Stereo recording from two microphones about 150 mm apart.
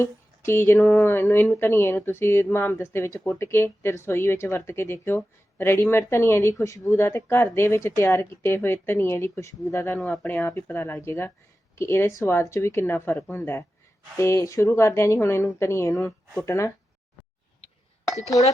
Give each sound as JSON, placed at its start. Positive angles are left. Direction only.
{"t": 0.0, "sound": "speech", "side_deg": 15}